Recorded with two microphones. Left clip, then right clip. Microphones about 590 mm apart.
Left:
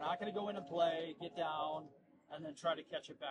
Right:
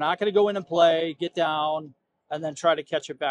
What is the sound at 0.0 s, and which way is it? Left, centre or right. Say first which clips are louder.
Speech: right 18 dB; right.